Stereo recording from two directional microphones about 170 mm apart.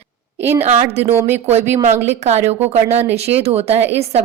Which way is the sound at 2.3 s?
40° right (ahead or behind).